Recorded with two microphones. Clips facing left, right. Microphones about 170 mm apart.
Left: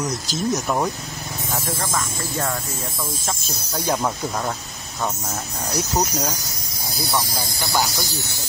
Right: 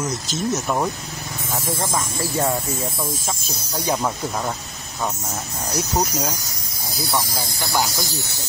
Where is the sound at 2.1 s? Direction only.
30° right (ahead or behind).